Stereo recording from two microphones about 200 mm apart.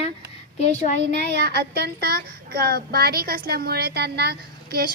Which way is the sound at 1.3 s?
55° right (ahead or behind).